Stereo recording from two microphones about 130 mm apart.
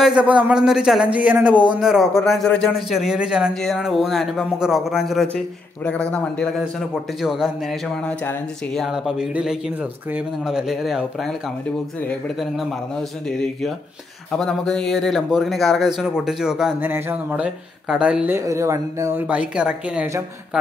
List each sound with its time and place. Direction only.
0.0 s a man's voice: 10° right (ahead or behind); by 6.5 s 10° left (ahead or behind)
7.2 s a man's voice: 5° right (ahead or behind)
8.7 s a man's voice: centre (ahead or behind)
14.3 s a man's voice: 5° left (ahead or behind)
16.8 s a man's voice: 15° right (ahead or behind)
18.4 s speech: 25° right (ahead or behind)
19.2 s a man's voice: 10° right (ahead or behind)